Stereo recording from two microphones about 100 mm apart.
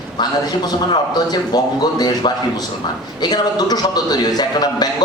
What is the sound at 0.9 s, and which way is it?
A man's voice, 45° left (ahead or behind).